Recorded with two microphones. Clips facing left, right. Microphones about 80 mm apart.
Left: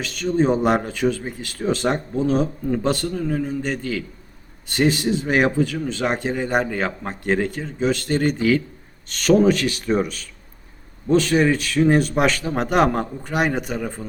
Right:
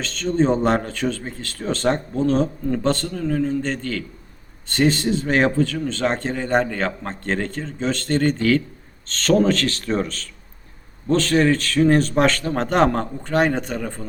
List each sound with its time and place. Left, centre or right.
0.0 s speech: centre